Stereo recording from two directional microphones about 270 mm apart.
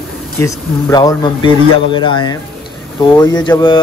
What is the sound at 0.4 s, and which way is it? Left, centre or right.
Speech, centre.